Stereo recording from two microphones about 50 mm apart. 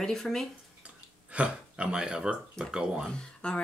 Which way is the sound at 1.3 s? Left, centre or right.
Right.